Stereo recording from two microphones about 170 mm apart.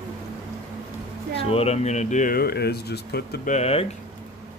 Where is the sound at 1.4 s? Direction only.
35° left (ahead or behind); by 3.3 s 70° left (ahead or behind).